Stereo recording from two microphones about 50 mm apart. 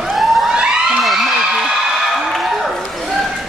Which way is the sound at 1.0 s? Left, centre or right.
Centre.